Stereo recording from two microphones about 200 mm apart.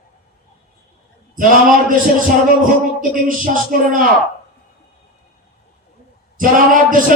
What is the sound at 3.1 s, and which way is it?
Speech, 45° right (ahead or behind).